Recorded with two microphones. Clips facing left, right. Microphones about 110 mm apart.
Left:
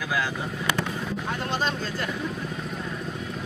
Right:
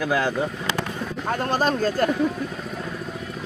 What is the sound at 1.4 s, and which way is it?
Speech, 45° right (ahead or behind).